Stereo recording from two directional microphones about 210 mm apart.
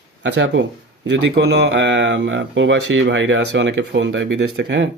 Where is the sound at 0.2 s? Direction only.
60° right (ahead or behind).